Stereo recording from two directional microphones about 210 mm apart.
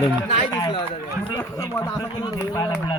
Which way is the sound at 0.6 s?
25° left (ahead or behind).